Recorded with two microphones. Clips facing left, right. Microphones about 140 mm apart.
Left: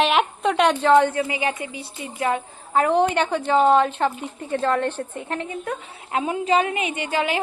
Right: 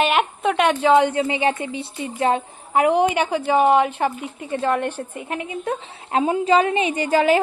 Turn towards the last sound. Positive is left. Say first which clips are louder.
# right 7 dB
turn(degrees=-40)  # may be behind; listen again after turning